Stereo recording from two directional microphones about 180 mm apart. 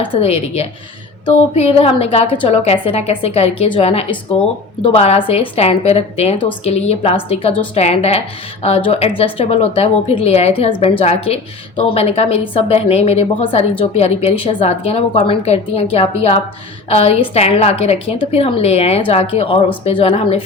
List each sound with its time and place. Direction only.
0.0 s a woman's voice: 30° left (ahead or behind)